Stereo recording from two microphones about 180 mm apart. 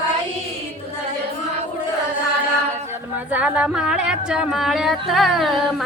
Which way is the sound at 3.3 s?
5° right (ahead or behind).